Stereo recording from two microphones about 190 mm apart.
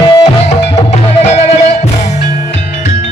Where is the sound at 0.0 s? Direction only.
30° left (ahead or behind).